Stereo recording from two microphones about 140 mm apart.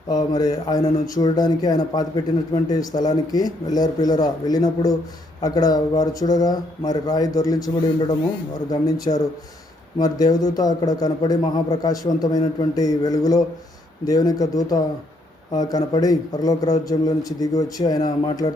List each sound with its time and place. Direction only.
0.1 s a man's voice: 25° left (ahead or behind)